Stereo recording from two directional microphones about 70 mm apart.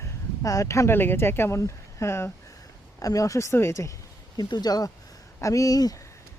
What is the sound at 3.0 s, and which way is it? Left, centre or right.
Speech, left.